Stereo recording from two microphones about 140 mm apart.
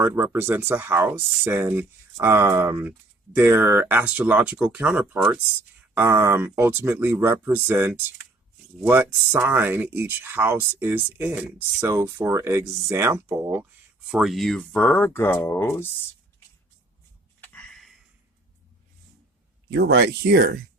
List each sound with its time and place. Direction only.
0.0 s speech: 15° right (ahead or behind)
14.1 s speech: 5° right (ahead or behind); by 15.9 s 15° left (ahead or behind)
17.4 s a sound: 10° left (ahead or behind)